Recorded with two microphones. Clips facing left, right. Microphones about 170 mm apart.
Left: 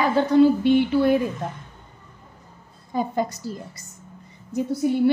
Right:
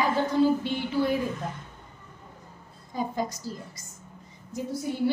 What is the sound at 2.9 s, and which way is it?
A woman's voice, 65° left (ahead or behind).